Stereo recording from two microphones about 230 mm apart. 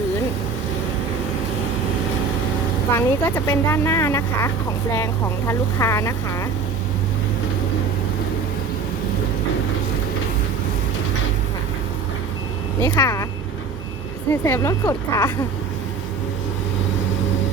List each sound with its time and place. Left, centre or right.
2.9 s speech: centre
12.8 s speech: centre
14.4 s speech: centre